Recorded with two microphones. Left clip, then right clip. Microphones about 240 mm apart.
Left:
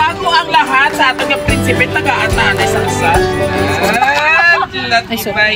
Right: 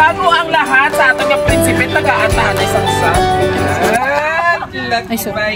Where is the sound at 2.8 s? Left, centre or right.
Centre.